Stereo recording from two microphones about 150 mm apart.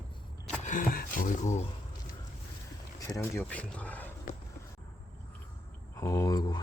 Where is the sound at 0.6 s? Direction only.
65° left (ahead or behind).